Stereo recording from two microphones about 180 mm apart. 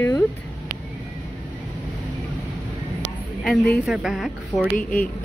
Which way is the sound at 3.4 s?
Centre (ahead or behind).